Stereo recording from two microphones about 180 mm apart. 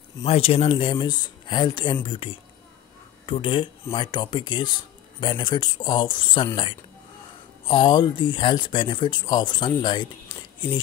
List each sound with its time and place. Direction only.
0.2 s speech: 35° left (ahead or behind)